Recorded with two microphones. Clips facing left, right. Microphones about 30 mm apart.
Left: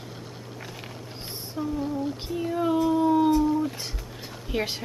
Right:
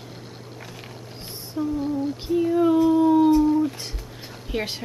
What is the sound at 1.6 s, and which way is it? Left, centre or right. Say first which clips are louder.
A woman's voice: right 4 dB; centre.